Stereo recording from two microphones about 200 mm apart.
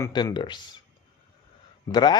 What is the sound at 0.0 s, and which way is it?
Speech, 20° left (ahead or behind).